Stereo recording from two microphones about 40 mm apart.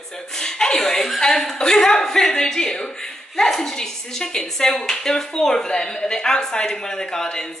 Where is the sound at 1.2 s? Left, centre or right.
Centre.